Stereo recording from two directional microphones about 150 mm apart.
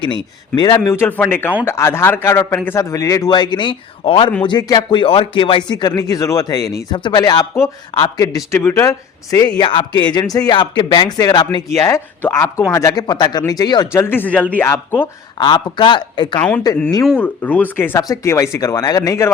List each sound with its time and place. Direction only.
0.0 s speech: 30° left (ahead or behind)
0.9 s speech: 15° left (ahead or behind)
9.6 s speech: 35° left (ahead or behind)
13.9 s speech: 15° left (ahead or behind)
15.4 s speech: 30° left (ahead or behind)
17.2 s speech: 10° left (ahead or behind)